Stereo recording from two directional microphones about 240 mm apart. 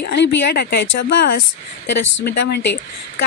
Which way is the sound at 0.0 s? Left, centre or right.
Left.